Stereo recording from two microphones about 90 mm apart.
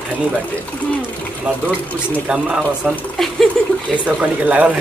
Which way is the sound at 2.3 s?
10° right (ahead or behind).